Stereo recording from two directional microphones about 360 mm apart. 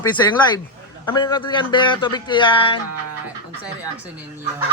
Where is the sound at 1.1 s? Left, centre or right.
Centre.